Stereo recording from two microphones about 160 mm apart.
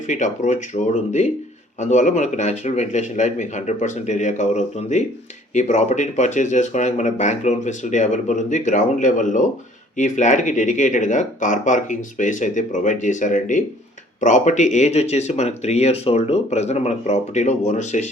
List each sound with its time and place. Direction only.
0.1 s speech: 50° left (ahead or behind)